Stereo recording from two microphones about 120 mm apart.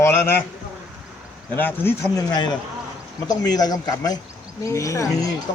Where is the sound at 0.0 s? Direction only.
20° left (ahead or behind).